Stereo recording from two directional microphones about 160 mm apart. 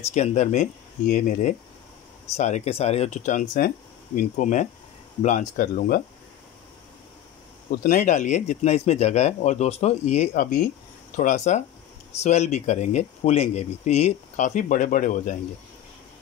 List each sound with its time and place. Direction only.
0.0 s speech: 45° left (ahead or behind); by 6.0 s 65° left (ahead or behind)
7.8 s speech: 50° left (ahead or behind)